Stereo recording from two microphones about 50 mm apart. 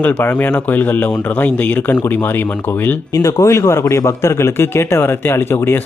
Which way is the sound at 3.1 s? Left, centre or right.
Left.